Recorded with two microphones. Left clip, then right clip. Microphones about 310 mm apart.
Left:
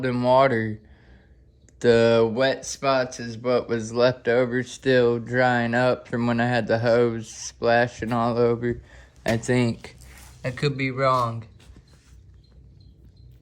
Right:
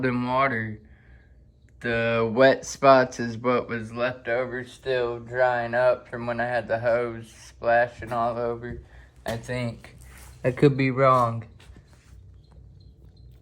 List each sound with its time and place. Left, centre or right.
0.0 s speech: centre
1.8 s speech: centre
10.4 s speech: centre